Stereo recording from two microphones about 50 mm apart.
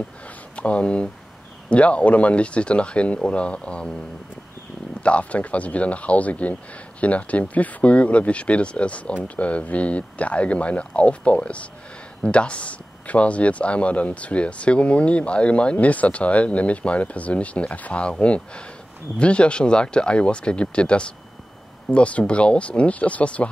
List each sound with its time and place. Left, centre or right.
0.6 s speech: left
5.0 s speech: left